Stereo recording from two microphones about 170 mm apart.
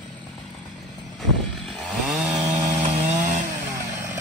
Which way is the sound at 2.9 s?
45° right (ahead or behind).